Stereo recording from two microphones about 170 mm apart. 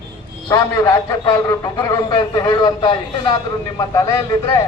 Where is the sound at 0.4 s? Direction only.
20° left (ahead or behind).